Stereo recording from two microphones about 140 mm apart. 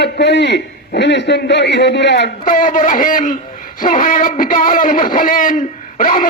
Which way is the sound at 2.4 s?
70° left (ahead or behind).